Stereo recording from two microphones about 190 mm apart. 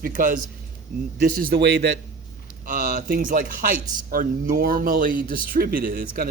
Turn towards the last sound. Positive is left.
turn(degrees=-50)  # may be behind; listen again after turning